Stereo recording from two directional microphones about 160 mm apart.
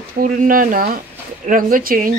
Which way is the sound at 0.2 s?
60° right (ahead or behind).